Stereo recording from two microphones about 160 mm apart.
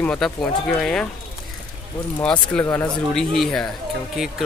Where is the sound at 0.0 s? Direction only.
5° left (ahead or behind).